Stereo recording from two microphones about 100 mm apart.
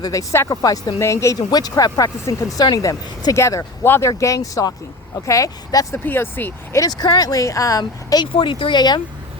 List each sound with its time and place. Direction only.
0.0 s speech: 35° left (ahead or behind)
1.4 s speech: 40° left (ahead or behind)
6.1 s speech: 20° left (ahead or behind)
6.7 s speech: 40° left (ahead or behind)
8.4 s speech: 60° left (ahead or behind)